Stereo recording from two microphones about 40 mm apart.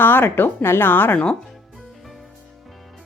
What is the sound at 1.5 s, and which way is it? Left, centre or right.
Music, centre.